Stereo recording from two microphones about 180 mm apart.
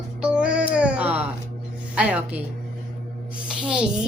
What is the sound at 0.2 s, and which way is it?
Music, 5° right (ahead or behind).